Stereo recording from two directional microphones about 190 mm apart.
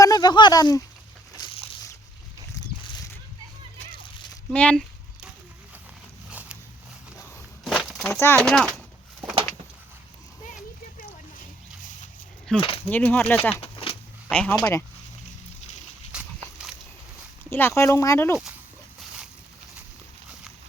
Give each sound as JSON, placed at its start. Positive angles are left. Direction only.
{"t": 0.0, "sound": "speech", "side_deg": 20}
{"t": 1.4, "sound": "a sound", "side_deg": 20}
{"t": 4.5, "sound": "speech", "side_deg": 5}
{"t": 6.3, "sound": "a sound", "side_deg": -10}
{"t": 7.6, "sound": "walk", "side_deg": 0}
{"t": 8.1, "sound": "speech", "side_deg": 15}
{"t": 8.4, "sound": "speech", "side_deg": 0}
{"t": 11.3, "sound": "a sound", "side_deg": 45}
{"t": 12.5, "sound": "speech", "side_deg": 30}
{"t": 12.9, "sound": "speech", "side_deg": 10}
{"t": 16.1, "sound": "a sound", "side_deg": -5}
{"t": 17.5, "sound": "speech", "side_deg": 10}